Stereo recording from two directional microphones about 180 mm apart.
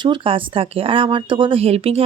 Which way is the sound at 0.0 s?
30° right (ahead or behind).